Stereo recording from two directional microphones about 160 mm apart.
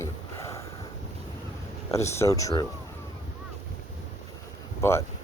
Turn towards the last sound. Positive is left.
turn(degrees=15)  # may be behind; listen again after turning